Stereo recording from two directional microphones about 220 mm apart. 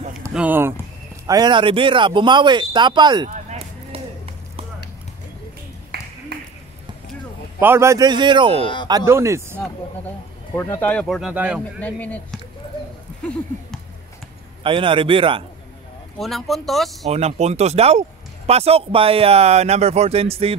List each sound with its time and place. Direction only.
0.3 s speech: 5° right (ahead or behind)
3.4 s run: 25° right (ahead or behind)
5.9 s a sound: 45° right (ahead or behind)
7.6 s speech: 10° right (ahead or behind)
9.6 s speech: 10° left (ahead or behind)
11.8 s speech: 5° left (ahead or behind)
14.6 s speech: 25° right (ahead or behind)
16.2 s speech: centre (ahead or behind)
17.1 s speech: 30° right (ahead or behind)